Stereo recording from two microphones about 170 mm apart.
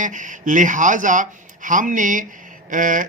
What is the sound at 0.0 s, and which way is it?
Speech, 50° right (ahead or behind).